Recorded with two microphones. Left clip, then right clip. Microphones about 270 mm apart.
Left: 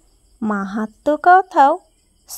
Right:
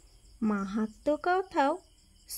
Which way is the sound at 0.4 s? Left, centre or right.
Left.